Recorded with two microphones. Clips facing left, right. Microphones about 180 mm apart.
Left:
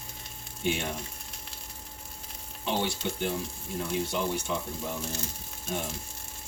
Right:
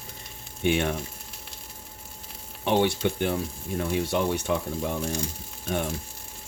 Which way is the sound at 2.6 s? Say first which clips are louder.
Right 7 dB; 60° right (ahead or behind).